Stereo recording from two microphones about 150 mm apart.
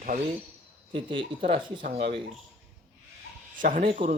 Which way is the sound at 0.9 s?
35° right (ahead or behind).